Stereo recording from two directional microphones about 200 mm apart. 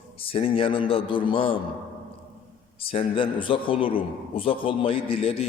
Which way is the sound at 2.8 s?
25° left (ahead or behind).